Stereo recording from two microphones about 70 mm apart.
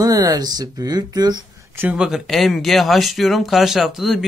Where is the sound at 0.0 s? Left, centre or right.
Right.